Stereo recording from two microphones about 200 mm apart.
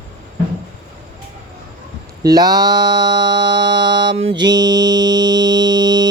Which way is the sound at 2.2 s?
20° right (ahead or behind).